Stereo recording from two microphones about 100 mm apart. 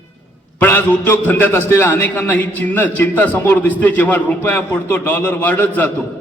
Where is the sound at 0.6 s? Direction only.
20° left (ahead or behind).